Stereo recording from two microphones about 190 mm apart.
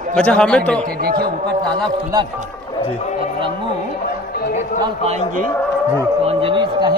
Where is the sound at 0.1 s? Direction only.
5° left (ahead or behind).